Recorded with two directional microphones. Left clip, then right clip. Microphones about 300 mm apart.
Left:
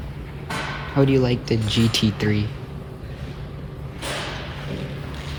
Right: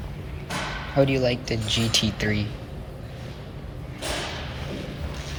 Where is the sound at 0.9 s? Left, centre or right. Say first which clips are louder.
Left 2 dB; centre.